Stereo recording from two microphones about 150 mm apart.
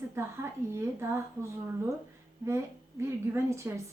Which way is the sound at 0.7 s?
15° right (ahead or behind).